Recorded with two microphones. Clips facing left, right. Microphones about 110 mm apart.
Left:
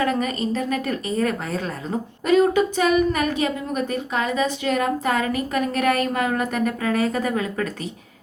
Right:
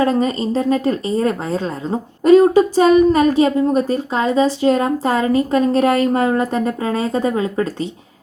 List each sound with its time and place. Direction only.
0.0 s a woman's voice: 30° right (ahead or behind)